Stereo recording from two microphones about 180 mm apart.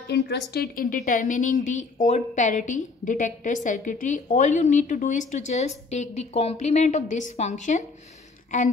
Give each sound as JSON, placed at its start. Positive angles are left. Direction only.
{"t": 0.1, "sound": "a woman's voice", "side_deg": 65}